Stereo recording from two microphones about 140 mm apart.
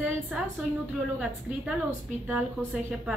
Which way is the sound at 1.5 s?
10° right (ahead or behind).